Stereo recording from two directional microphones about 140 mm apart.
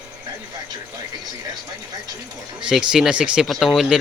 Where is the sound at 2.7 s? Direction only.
5° right (ahead or behind).